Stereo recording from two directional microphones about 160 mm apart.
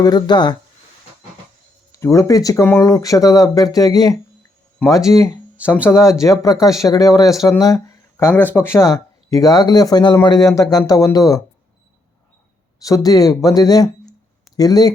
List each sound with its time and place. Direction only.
0.0 s speech: 25° left (ahead or behind)
1.9 s speech: 20° left (ahead or behind)
12.8 s speech: 20° left (ahead or behind)